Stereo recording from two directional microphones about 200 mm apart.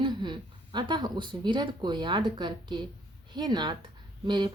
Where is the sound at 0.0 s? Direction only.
20° right (ahead or behind).